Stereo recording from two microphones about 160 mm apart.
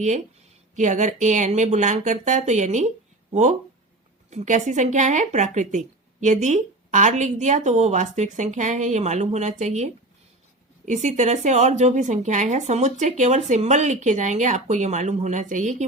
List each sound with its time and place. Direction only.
0.8 s a woman's voice: 50° right (ahead or behind)
4.3 s a woman's voice: 50° right (ahead or behind)